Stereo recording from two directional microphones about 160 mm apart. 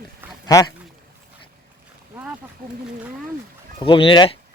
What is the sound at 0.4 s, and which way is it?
Speech, 25° left (ahead or behind).